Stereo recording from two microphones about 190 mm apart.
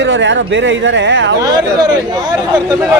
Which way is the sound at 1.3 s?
20° right (ahead or behind).